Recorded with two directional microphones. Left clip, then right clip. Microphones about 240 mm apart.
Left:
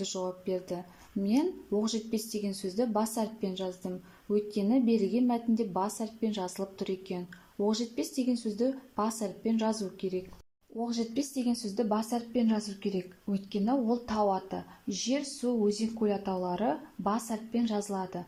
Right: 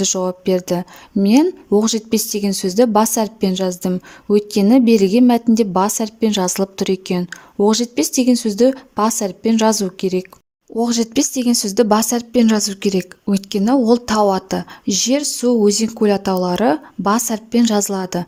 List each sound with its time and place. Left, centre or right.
0.0 s speech: right